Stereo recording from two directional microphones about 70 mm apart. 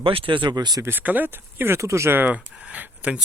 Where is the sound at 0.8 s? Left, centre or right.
Right.